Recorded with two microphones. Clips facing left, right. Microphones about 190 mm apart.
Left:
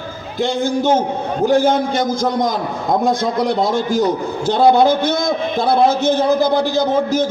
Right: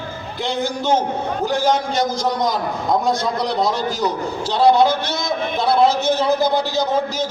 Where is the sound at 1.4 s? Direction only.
55° left (ahead or behind).